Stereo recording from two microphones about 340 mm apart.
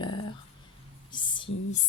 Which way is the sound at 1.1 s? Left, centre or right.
Centre.